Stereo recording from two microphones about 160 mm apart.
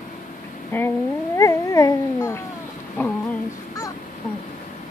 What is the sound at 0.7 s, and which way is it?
Speech, 10° left (ahead or behind).